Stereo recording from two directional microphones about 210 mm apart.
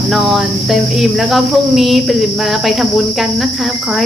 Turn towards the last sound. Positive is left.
turn(degrees=0)  # may be behind; listen again after turning